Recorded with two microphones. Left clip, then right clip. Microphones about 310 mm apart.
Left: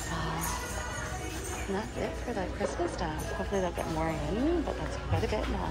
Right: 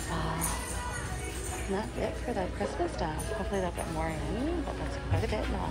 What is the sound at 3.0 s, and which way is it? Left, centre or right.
Speech, centre.